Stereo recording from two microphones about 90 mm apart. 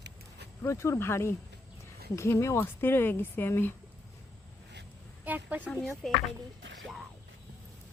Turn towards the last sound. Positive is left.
turn(degrees=0)  # may be behind; listen again after turning